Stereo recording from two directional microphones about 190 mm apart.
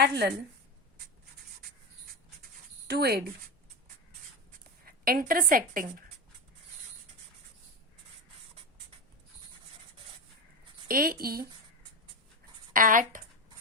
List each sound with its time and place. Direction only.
0.0 s a woman's voice: 60° right (ahead or behind)
2.4 s writing: 55° right (ahead or behind)
4.9 s a woman's voice: 50° right (ahead or behind)
10.8 s speech: 50° right (ahead or behind)
12.7 s speech: 45° right (ahead or behind)